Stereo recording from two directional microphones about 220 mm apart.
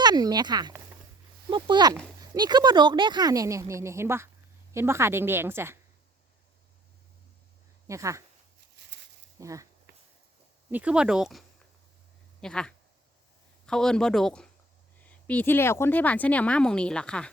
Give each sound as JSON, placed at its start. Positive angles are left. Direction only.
{"t": 0.0, "sound": "speech", "side_deg": -20}
{"t": 7.9, "sound": "speech", "side_deg": -15}
{"t": 9.4, "sound": "speech", "side_deg": -15}
{"t": 10.7, "sound": "speech", "side_deg": -5}